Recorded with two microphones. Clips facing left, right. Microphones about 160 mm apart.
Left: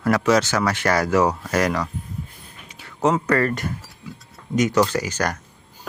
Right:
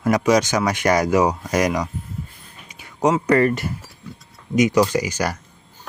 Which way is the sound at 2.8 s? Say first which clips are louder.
Right 1 dB; 15° right (ahead or behind).